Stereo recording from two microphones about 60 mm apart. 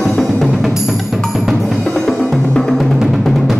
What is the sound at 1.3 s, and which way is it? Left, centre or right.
Drum, centre.